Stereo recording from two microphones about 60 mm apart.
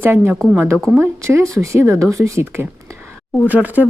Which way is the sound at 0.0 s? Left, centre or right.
Right.